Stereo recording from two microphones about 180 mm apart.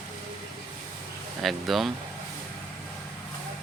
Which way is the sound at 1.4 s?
Centre (ahead or behind).